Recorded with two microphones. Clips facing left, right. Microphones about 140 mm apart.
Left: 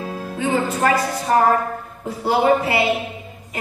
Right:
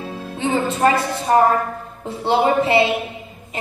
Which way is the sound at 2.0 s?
25° right (ahead or behind).